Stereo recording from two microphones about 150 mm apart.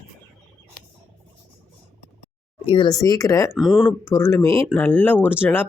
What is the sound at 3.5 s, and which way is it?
Speech, centre (ahead or behind).